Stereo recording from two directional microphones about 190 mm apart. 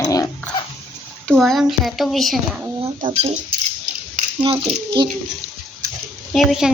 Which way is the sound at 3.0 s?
35° right (ahead or behind).